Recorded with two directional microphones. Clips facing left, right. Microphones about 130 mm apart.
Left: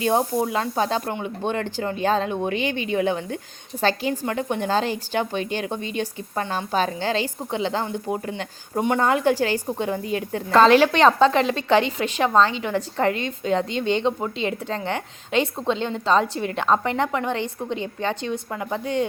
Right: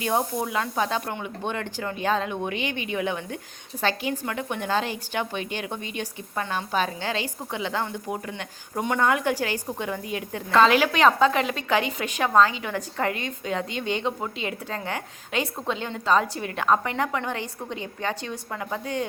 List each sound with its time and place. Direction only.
0.0 s a woman's voice: 30° left (ahead or behind)